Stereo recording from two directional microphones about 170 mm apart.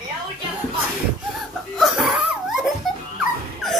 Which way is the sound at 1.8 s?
Centre (ahead or behind).